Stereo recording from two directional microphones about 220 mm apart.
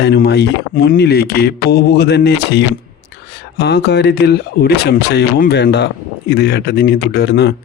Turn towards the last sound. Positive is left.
turn(degrees=50)  # may be behind; listen again after turning